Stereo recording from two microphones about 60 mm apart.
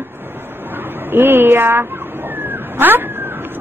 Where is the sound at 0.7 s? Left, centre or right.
Right.